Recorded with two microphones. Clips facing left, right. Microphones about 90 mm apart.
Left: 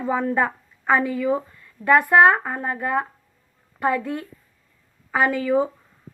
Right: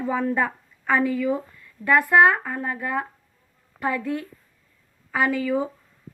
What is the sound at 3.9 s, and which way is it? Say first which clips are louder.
Speech: left 2 dB; 5° left (ahead or behind).